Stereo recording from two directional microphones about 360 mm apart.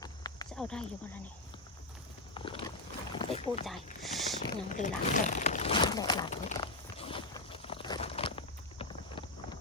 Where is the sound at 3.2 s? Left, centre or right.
Centre.